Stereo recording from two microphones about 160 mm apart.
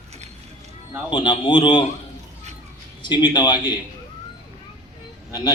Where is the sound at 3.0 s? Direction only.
30° left (ahead or behind).